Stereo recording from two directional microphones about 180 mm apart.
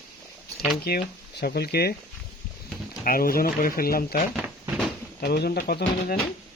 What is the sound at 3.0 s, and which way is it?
Speech, 55° left (ahead or behind).